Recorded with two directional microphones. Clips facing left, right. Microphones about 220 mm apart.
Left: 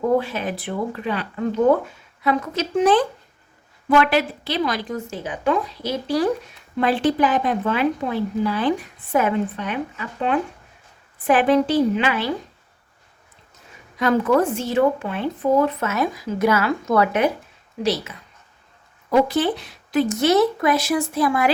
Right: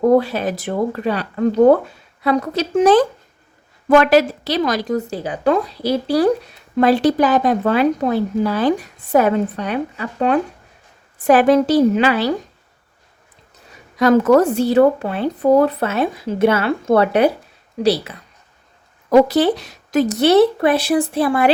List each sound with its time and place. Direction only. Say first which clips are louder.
0.0 s speech: right 6 dB; 40° right (ahead or behind)
13.9 s speech: right 6 dB; 40° right (ahead or behind)